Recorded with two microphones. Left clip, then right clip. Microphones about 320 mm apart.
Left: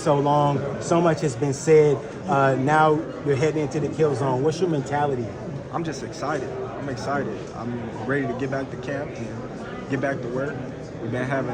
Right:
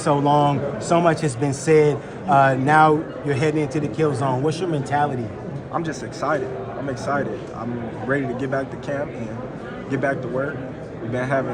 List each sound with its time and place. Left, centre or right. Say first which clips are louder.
0.0 s speech: right 2 dB; right
5.7 s speech: right 3 dB; centre
8.1 s speech: right 3 dB; centre